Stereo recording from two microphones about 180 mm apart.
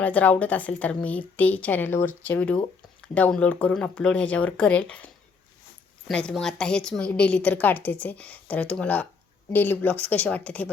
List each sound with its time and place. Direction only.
0.0 s a woman's voice: 10° left (ahead or behind)